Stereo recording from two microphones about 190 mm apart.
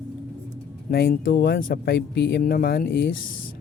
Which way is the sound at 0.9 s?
55° left (ahead or behind).